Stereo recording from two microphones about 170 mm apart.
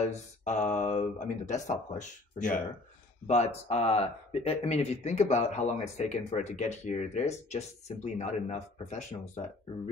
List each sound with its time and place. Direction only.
0.0 s speech: 45° left (ahead or behind)